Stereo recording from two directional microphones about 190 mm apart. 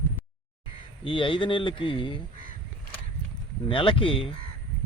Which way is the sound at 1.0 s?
25° left (ahead or behind).